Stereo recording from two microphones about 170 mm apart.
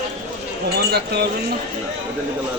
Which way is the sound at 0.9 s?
75° right (ahead or behind).